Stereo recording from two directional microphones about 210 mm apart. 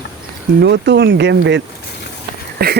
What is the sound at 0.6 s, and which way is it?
Speech, 55° right (ahead or behind).